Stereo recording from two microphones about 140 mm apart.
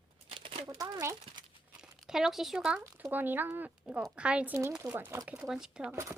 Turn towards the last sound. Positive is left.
turn(degrees=-20)  # may be behind; listen again after turning